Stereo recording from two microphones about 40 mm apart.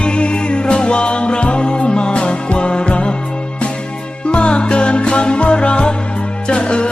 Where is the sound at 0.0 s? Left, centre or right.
Left.